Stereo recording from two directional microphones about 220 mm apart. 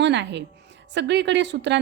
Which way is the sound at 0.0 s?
50° right (ahead or behind).